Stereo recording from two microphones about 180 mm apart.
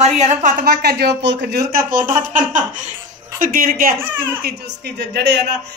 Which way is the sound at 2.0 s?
45° right (ahead or behind).